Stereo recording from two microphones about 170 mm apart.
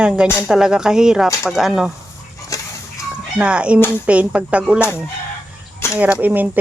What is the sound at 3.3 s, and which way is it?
Speech, 5° right (ahead or behind).